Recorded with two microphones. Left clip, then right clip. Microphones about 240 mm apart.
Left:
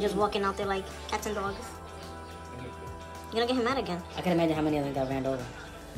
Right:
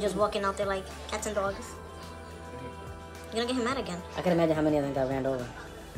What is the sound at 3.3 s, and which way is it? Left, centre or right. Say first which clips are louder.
Speech: left 2 dB; centre.